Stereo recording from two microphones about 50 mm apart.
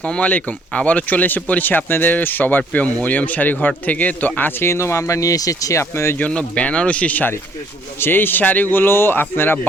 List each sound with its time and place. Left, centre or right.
0.0 s speech: left
4.6 s speech: left
5.7 s speech: left
6.3 s speech: left
8.0 s speech: left